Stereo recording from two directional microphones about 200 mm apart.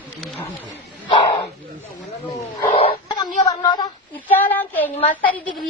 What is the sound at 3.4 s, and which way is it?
Child singing, 20° left (ahead or behind).